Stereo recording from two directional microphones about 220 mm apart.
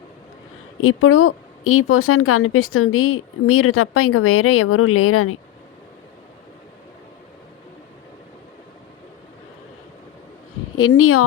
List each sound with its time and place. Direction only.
0.8 s speech: 75° left (ahead or behind)
10.8 s speech: 80° left